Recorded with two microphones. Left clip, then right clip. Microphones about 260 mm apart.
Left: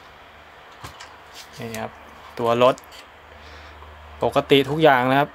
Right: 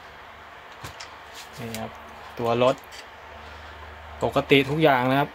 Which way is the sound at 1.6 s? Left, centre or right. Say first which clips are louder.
Left 4 dB; left.